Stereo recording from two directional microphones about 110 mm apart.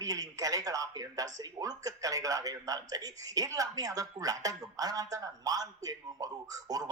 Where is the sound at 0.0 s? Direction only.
35° right (ahead or behind).